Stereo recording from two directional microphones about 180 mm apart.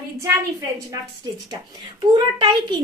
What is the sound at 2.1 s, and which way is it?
Speech, 25° right (ahead or behind).